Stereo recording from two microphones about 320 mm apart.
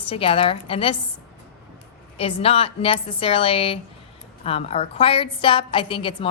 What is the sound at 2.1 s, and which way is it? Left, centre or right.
A woman's voice, centre.